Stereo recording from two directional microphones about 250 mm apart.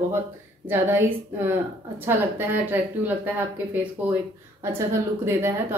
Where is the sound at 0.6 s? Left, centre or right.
Centre.